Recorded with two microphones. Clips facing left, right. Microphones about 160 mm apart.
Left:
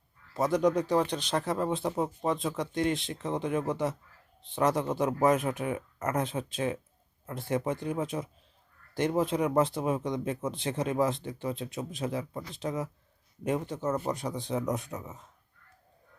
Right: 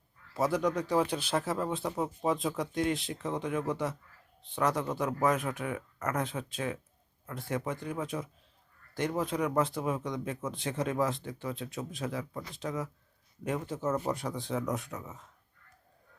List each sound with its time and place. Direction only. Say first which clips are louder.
0.3 s a man's voice: left 3 dB; 5° right (ahead or behind)
1.5 s speech: left 3 dB; 25° left (ahead or behind)
2.2 s speech: even; centre (ahead or behind)
3.2 s speech: left 2 dB; 25° left (ahead or behind)
13.7 s speech: left 1 dB; 5° right (ahead or behind)
14.1 s speech: left 1 dB; 15° left (ahead or behind)